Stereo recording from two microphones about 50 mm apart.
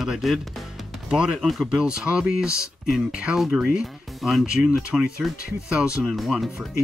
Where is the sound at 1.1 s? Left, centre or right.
Centre.